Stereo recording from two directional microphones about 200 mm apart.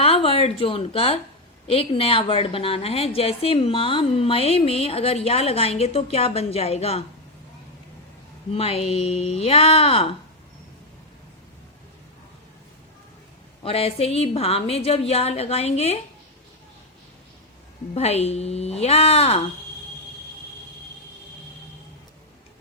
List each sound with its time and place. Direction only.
0.0 s a woman's voice: 30° left (ahead or behind)
8.5 s a woman's voice: 30° left (ahead or behind)
13.6 s a woman's voice: 30° left (ahead or behind)
17.9 s a woman's voice: 30° left (ahead or behind)